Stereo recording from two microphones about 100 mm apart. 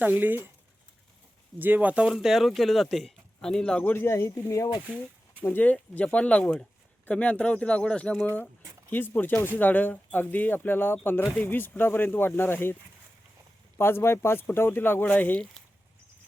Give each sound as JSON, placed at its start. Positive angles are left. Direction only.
{"t": 0.0, "sound": "speech", "side_deg": -20}
{"t": 1.5, "sound": "speech", "side_deg": -20}
{"t": 3.9, "sound": "speech", "side_deg": 25}
{"t": 5.4, "sound": "speech", "side_deg": 15}
{"t": 13.7, "sound": "speech", "side_deg": 25}